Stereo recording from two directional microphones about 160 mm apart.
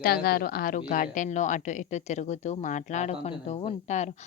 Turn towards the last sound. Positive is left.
turn(degrees=40)  # may be behind; listen again after turning